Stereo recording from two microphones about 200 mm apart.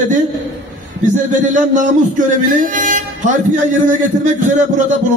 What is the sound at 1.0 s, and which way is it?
A man's voice, 40° right (ahead or behind).